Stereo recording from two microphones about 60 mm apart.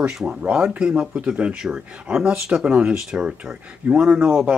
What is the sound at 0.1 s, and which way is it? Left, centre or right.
Speech, centre.